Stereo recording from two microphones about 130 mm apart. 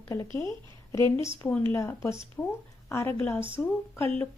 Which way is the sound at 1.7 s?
20° left (ahead or behind).